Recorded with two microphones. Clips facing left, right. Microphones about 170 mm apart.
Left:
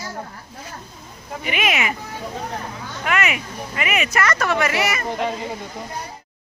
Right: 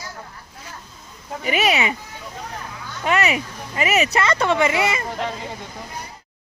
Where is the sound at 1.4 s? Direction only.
35° right (ahead or behind).